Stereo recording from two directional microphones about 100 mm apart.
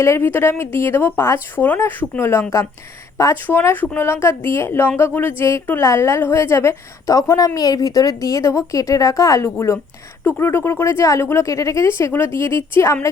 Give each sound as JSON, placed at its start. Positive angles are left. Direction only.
{"t": 0.0, "sound": "a woman's voice", "side_deg": 25}